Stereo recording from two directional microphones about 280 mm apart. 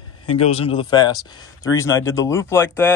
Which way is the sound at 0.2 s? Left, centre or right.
Left.